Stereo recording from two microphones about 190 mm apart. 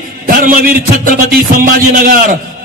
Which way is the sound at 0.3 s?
45° right (ahead or behind).